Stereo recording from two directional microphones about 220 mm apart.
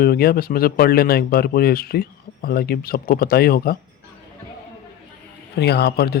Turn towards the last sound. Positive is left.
turn(degrees=45)  # may be behind; listen again after turning